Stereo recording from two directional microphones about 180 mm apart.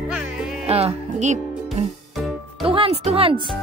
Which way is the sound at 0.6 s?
35° right (ahead or behind).